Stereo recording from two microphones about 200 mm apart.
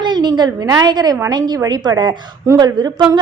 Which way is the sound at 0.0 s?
20° right (ahead or behind).